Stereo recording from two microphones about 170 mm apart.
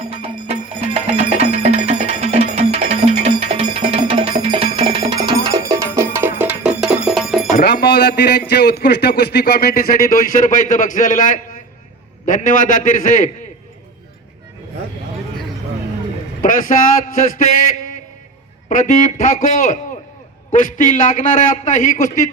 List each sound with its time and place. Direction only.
0.1 s music: 35° right (ahead or behind); by 7.5 s centre (ahead or behind)
7.5 s a man's voice: 65° left (ahead or behind); by 13.3 s 50° left (ahead or behind)
16.4 s a man's voice: 55° left (ahead or behind)
18.7 s a man's voice: 50° left (ahead or behind)